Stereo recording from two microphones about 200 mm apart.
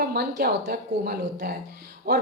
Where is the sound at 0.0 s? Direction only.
50° right (ahead or behind).